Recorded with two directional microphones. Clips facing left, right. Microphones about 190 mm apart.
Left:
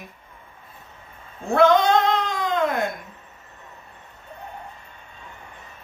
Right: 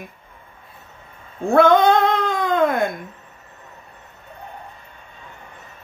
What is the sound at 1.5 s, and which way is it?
Cat, 55° right (ahead or behind).